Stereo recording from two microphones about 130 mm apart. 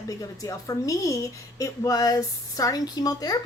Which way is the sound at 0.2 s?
25° left (ahead or behind).